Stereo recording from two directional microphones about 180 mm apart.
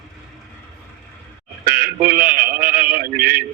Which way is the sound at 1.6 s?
55° right (ahead or behind).